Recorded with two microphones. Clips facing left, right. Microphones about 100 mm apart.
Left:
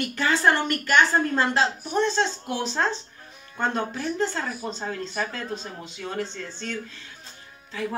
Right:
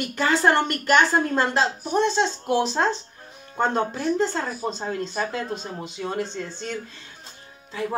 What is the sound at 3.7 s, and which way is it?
A woman's voice, 30° right (ahead or behind).